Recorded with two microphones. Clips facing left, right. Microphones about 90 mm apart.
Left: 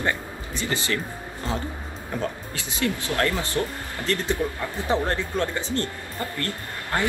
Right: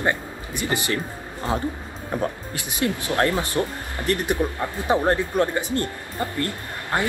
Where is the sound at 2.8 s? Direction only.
20° right (ahead or behind).